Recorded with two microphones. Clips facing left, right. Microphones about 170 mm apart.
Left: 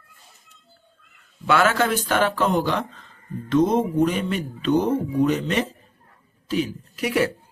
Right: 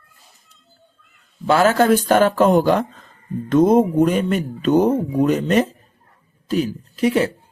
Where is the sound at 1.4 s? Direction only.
35° right (ahead or behind).